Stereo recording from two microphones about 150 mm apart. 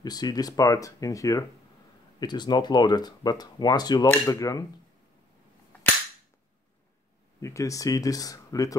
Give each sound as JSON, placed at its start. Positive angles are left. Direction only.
{"t": 0.0, "sound": "speech", "side_deg": 25}
{"t": 7.3, "sound": "speech", "side_deg": 20}